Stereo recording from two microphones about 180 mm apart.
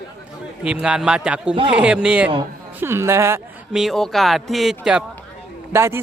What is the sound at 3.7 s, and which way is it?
Speech, centre (ahead or behind).